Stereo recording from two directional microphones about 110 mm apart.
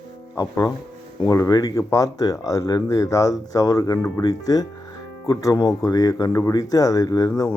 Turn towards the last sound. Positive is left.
turn(degrees=30)  # may be behind; listen again after turning